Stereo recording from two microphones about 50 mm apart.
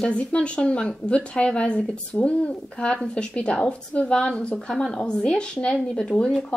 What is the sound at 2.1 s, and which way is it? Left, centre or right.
A woman's voice, left.